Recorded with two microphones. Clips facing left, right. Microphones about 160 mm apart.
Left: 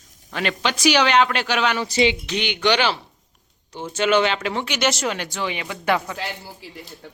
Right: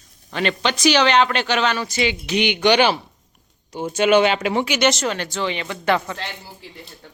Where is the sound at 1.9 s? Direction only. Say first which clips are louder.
Left 3 dB; 30° left (ahead or behind).